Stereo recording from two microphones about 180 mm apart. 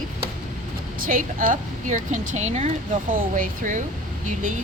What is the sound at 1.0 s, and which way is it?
Speech, 50° right (ahead or behind).